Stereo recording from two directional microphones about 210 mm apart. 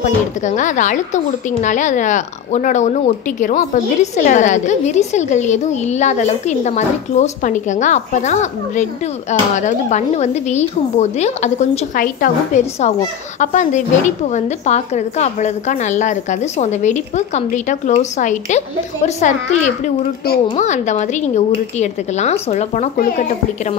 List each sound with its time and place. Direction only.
0.0 s a woman's voice: 35° left (ahead or behind)